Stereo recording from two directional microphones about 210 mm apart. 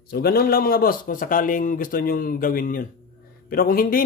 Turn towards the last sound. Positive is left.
turn(degrees=45)  # may be behind; listen again after turning